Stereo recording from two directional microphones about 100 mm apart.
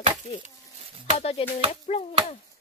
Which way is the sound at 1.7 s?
90° left.